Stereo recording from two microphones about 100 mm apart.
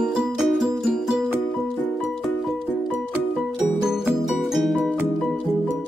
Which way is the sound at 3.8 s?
5° right (ahead or behind).